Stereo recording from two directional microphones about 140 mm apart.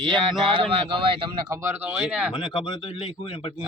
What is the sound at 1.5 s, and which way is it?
Speech, 20° right (ahead or behind).